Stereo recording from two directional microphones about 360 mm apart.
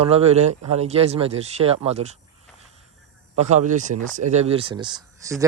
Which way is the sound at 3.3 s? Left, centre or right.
Centre.